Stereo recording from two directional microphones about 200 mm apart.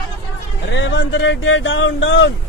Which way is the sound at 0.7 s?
65° left (ahead or behind).